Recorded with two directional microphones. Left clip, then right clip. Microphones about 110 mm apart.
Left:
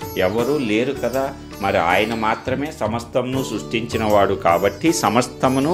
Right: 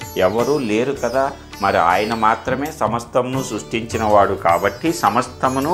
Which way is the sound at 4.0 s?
40° left (ahead or behind).